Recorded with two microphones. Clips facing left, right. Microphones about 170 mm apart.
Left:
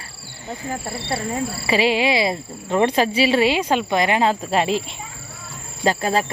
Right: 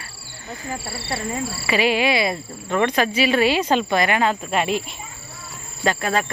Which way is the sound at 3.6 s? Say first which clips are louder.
Even; 10° left (ahead or behind).